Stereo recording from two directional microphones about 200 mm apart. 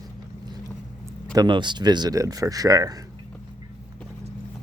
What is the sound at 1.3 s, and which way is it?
Speech, 20° right (ahead or behind).